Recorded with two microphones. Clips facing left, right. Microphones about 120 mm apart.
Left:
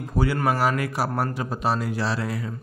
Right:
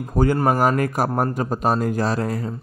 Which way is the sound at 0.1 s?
45° right (ahead or behind).